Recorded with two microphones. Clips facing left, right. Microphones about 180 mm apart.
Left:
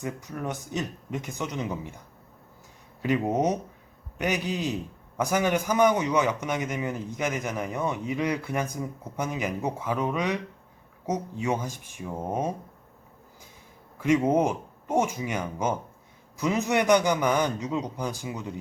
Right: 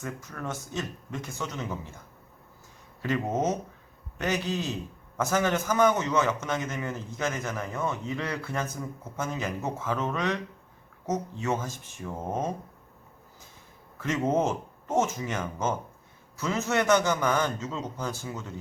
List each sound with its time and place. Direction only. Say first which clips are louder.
0.0 s a man's voice: left 3 dB; 15° left (ahead or behind)
3.0 s a man's voice: left 3 dB; 15° left (ahead or behind)
14.0 s a man's voice: left 4 dB; 10° left (ahead or behind)